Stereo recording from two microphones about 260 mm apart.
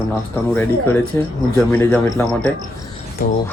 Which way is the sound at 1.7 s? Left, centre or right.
Centre.